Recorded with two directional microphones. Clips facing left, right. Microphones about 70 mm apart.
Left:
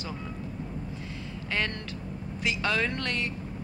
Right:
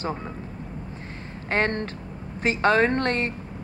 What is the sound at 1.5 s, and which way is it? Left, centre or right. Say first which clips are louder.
Speech: right 8 dB; right.